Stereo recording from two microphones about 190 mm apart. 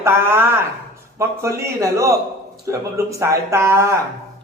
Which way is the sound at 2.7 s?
15° right (ahead or behind).